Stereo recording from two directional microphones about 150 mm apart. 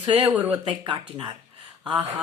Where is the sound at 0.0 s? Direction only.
35° right (ahead or behind).